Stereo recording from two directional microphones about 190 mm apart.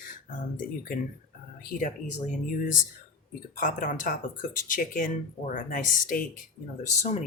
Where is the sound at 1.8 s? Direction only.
45° left (ahead or behind).